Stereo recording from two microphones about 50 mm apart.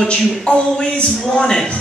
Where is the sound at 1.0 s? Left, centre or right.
Centre.